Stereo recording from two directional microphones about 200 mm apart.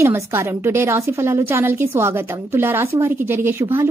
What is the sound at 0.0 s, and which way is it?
A woman's voice, 15° right (ahead or behind).